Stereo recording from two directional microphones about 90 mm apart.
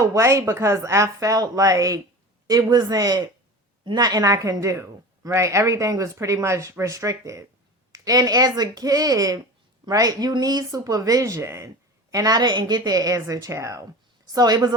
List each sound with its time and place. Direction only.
0.0 s a woman's voice: 35° right (ahead or behind)
12.1 s a woman's voice: 45° right (ahead or behind)
14.3 s speech: 45° right (ahead or behind)